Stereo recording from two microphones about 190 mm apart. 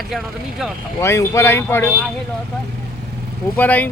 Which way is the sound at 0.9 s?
15° left (ahead or behind).